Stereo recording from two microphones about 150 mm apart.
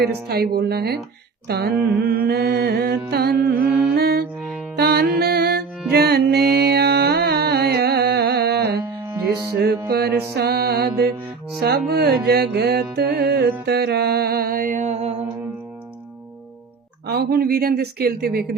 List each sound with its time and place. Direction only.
0.3 s music: 90° right
3.7 s mantra: 10° right (ahead or behind)
3.9 s music: 90° right
4.4 s music: centre (ahead or behind)
4.8 s music: 90° right
9.0 s music: 25° right (ahead or behind)
9.9 s music: 90° right; by 15.1 s 45° right (ahead or behind)
17.1 s music: 90° right